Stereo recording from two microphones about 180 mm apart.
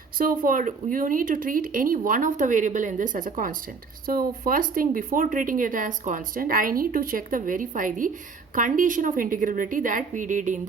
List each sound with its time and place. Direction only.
0.2 s speech: 50° right (ahead or behind)